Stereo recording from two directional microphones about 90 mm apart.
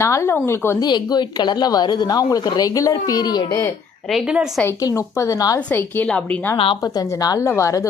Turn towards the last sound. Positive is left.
turn(degrees=35)  # may be behind; listen again after turning